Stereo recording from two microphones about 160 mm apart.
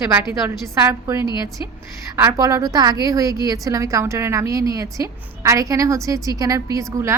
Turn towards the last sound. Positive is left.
turn(degrees=-20)  # may be behind; listen again after turning